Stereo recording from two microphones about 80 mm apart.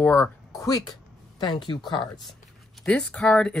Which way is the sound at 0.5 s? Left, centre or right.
Left.